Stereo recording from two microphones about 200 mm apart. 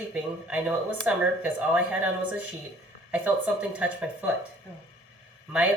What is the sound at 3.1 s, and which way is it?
Speech, 5° right (ahead or behind).